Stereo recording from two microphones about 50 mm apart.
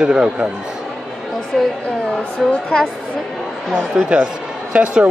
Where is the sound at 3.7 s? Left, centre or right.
Centre.